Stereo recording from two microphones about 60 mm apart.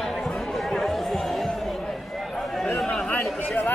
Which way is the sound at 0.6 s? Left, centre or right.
Centre.